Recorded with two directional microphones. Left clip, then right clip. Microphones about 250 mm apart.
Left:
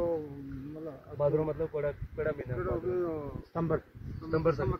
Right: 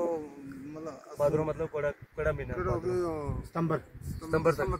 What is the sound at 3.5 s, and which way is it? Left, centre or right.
Speech, right.